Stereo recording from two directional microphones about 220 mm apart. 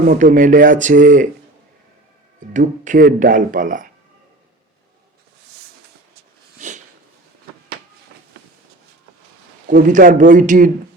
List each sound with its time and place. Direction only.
0.0 s speech: 35° right (ahead or behind)
2.5 s speech: 35° right (ahead or behind)
6.6 s a sound: 35° right (ahead or behind)
9.6 s speech: 35° right (ahead or behind)